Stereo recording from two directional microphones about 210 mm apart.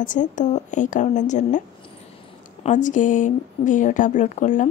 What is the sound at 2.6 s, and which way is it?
Speech, 35° left (ahead or behind).